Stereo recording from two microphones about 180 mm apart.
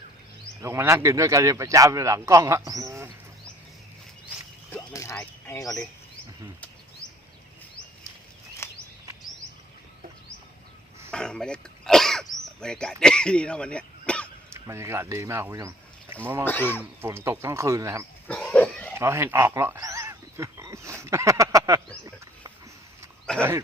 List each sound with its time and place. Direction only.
0.6 s a man's voice: 15° right (ahead or behind)
4.7 s a sound: 15° left (ahead or behind)
5.5 s speech: 20° left (ahead or behind)
8.6 s a sound: 15° left (ahead or behind)
11.1 s throat clearing: 5° left (ahead or behind)
12.5 s speech: 5° left (ahead or behind)
14.5 s speech: 15° right (ahead or behind)
16.4 s speech: 10° left (ahead or behind)
17.0 s a man's voice: 15° right (ahead or behind)
18.3 s pig: 5° left (ahead or behind)
18.9 s a sound: 15° right (ahead or behind)
23.4 s speech: 15° right (ahead or behind)